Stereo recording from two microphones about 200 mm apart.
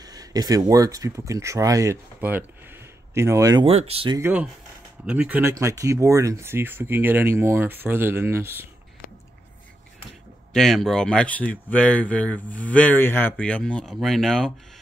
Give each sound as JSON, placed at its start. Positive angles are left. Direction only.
{"t": 0.0, "sound": "speech", "side_deg": -20}
{"t": 4.2, "sound": "speech", "side_deg": -5}
{"t": 10.5, "sound": "speech", "side_deg": 0}